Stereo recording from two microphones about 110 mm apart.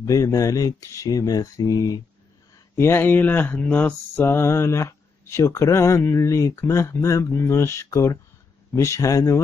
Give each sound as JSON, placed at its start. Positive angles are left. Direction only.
{"t": 0.0, "sound": "speech", "side_deg": 30}
{"t": 2.7, "sound": "mantra", "side_deg": 20}